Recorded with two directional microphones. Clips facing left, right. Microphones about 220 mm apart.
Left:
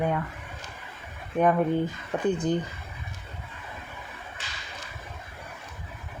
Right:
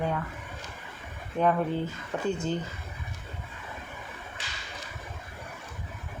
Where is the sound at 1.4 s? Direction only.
15° left (ahead or behind).